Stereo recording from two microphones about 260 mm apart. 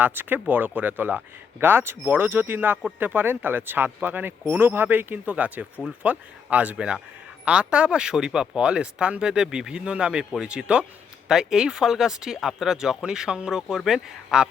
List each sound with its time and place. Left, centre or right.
0.0 s speech: centre